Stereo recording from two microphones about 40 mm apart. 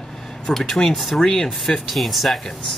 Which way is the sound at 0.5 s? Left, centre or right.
Centre.